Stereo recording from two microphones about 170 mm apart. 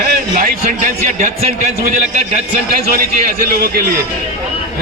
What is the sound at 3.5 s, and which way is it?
Speech, 65° right (ahead or behind).